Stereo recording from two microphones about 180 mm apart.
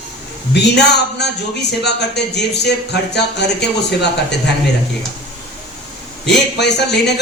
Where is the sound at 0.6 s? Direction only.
70° left (ahead or behind).